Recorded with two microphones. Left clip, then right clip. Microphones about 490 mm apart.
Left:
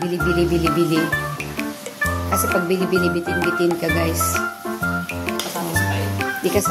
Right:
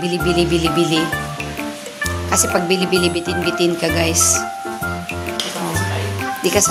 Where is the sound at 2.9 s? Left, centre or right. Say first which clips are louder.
Right 2 dB; left.